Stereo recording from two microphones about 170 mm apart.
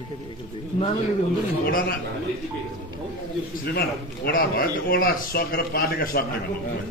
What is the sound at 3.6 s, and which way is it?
A man's voice, 65° left (ahead or behind).